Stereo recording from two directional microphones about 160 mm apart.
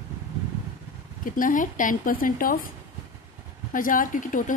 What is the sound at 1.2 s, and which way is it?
A woman's voice, 60° left (ahead or behind).